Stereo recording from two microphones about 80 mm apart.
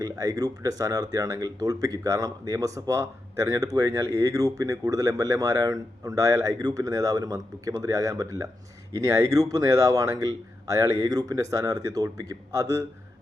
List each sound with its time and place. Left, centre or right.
0.0 s speech: right